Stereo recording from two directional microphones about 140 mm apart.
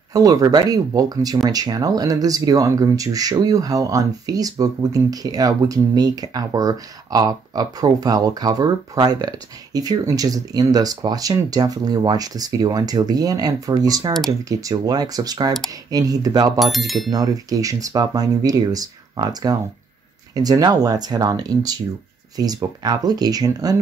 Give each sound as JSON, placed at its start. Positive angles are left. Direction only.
{"t": 0.1, "sound": "speech", "side_deg": -25}
{"t": 16.5, "sound": "speech", "side_deg": 0}
{"t": 17.1, "sound": "speech", "side_deg": -25}